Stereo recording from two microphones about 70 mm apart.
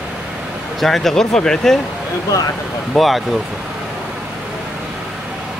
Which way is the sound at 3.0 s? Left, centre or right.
Centre.